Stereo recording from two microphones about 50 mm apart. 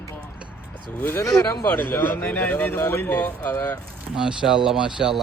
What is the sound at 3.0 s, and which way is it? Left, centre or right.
Speech, left.